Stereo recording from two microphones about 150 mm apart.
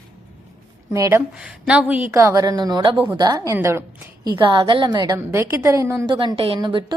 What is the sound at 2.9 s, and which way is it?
Speech, 15° right (ahead or behind).